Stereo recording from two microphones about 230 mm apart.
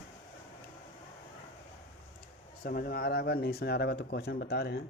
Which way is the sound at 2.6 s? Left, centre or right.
Left.